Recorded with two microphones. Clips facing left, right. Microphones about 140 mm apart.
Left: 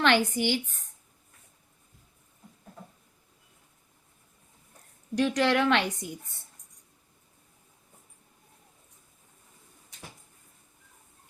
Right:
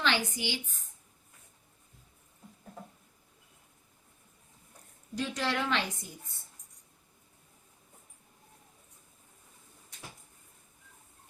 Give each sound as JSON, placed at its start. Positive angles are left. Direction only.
{"t": 0.0, "sound": "a woman's voice", "side_deg": 55}
{"t": 5.1, "sound": "a woman's voice", "side_deg": 75}